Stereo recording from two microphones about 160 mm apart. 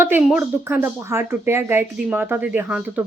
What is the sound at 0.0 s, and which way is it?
Speech, 10° right (ahead or behind).